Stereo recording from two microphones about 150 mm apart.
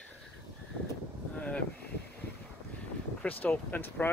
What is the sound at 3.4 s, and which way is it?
Speech, 10° left (ahead or behind).